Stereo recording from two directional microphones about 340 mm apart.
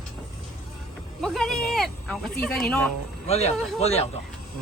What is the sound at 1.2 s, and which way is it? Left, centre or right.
Speech, centre.